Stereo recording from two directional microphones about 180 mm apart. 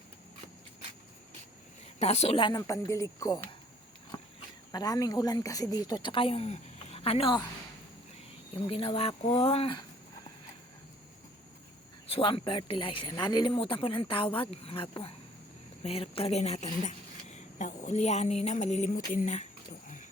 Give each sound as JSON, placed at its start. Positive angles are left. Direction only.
{"t": 2.0, "sound": "speech", "side_deg": 35}
{"t": 4.7, "sound": "speech", "side_deg": 20}
{"t": 8.6, "sound": "speech", "side_deg": 30}
{"t": 12.0, "sound": "a woman's voice", "side_deg": 30}